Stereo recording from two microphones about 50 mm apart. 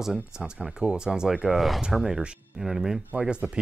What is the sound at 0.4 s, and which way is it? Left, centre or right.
Speech, centre.